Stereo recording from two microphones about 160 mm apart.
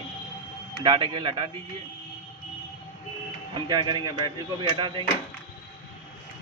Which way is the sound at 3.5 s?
25° right (ahead or behind).